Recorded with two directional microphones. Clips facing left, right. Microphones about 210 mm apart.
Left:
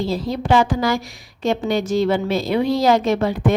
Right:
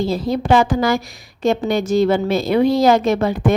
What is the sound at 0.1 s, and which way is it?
A woman's voice, 50° right (ahead or behind).